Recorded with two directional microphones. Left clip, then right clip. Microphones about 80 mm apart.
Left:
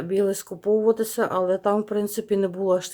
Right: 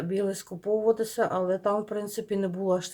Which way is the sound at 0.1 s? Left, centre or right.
Left.